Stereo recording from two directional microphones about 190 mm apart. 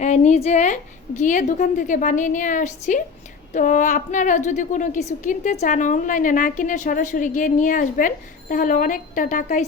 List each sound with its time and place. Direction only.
0.0 s a woman's voice: 35° left (ahead or behind)